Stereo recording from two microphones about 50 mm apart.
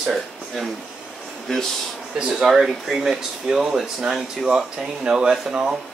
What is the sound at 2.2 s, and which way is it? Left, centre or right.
Speech, centre.